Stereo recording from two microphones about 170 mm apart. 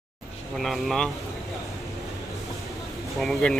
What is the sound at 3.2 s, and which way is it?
Speech, 5° left (ahead or behind).